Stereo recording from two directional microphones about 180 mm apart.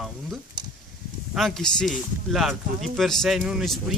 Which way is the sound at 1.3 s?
Centre (ahead or behind).